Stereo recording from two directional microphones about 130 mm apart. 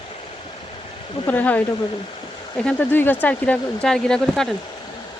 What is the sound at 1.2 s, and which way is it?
Speech, 10° left (ahead or behind).